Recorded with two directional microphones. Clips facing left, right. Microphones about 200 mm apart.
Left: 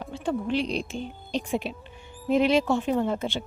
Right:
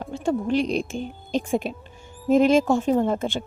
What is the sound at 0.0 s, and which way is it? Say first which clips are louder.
A woman's voice: right 4 dB; 45° right (ahead or behind).